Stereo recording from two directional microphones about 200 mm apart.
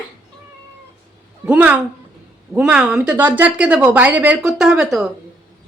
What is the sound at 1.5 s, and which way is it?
A woman's voice, 5° right (ahead or behind).